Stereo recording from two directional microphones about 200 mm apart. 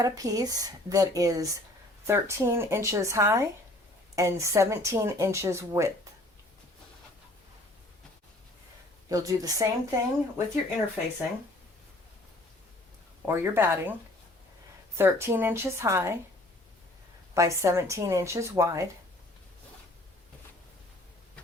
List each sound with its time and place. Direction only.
0.0 s speech: 20° right (ahead or behind)
9.0 s speech: 15° right (ahead or behind)
13.2 s speech: 10° right (ahead or behind)
14.9 s speech: 10° right (ahead or behind)
17.3 s speech: 15° right (ahead or behind)